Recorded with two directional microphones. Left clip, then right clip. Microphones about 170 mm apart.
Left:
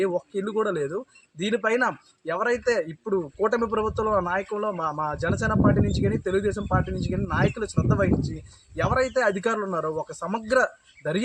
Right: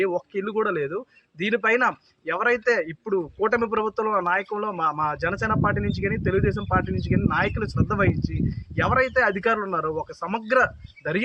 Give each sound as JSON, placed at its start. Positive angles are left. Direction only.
{"t": 0.3, "sound": "speech", "side_deg": -20}